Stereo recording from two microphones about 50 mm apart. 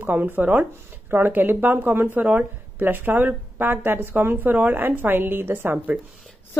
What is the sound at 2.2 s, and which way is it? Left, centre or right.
A woman's voice, right.